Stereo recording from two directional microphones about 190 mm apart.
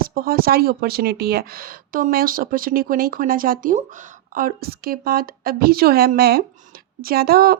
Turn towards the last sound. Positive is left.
turn(degrees=-55)  # may be behind; listen again after turning